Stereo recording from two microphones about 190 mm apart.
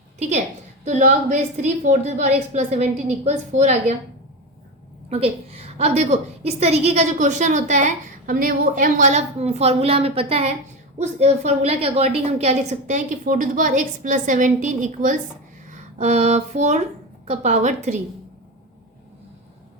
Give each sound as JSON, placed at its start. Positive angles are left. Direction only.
{"t": 0.2, "sound": "a woman's voice", "side_deg": -35}
{"t": 5.0, "sound": "a woman's voice", "side_deg": -30}